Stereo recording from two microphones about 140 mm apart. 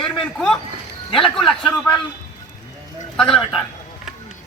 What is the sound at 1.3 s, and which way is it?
Speech, centre (ahead or behind).